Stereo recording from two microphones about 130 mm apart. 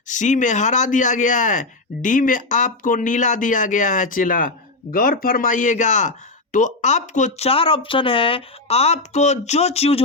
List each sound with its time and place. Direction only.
0.1 s speech: 70° left (ahead or behind); by 10.0 s 55° left (ahead or behind)